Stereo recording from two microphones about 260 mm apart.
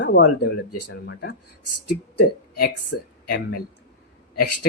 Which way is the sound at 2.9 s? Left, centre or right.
Left.